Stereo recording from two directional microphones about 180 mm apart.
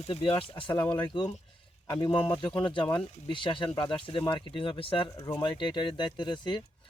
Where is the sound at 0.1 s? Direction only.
30° left (ahead or behind).